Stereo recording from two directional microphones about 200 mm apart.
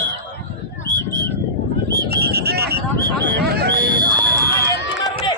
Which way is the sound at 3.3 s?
50° right (ahead or behind).